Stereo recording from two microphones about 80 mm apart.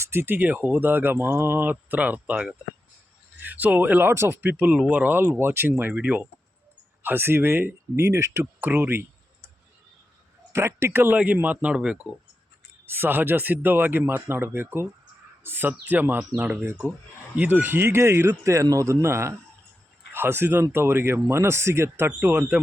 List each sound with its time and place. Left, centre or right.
0.0 s a man's voice: right
4.4 s speech: right
5.9 s speech: centre
7.0 s speech: right
10.5 s a man's voice: right; by 11.9 s centre
12.8 s speech: right
17.3 s a man's voice: centre